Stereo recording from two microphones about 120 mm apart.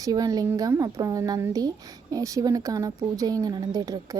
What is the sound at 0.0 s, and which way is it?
Speech, 30° right (ahead or behind).